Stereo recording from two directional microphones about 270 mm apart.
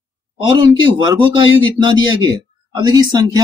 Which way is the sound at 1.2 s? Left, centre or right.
Left.